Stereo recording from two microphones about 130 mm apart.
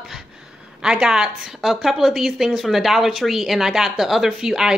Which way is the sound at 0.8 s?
5° right (ahead or behind).